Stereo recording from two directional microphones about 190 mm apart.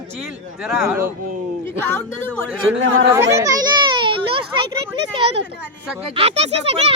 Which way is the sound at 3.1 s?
15° right (ahead or behind).